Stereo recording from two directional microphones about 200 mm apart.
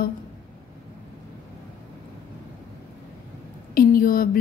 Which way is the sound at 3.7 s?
45° left (ahead or behind).